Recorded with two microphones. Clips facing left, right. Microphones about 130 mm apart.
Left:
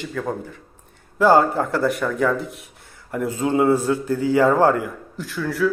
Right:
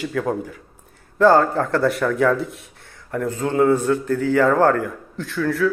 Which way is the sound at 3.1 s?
15° left (ahead or behind).